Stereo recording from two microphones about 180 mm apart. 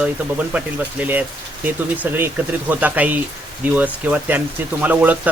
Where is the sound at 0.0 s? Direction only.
10° right (ahead or behind).